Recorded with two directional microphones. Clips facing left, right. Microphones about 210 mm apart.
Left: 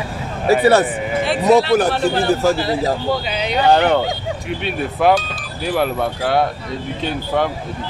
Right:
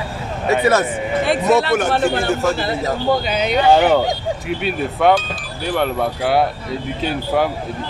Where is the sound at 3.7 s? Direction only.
5° right (ahead or behind).